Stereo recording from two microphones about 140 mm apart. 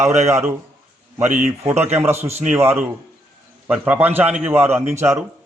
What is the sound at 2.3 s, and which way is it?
Speech, 50° right (ahead or behind).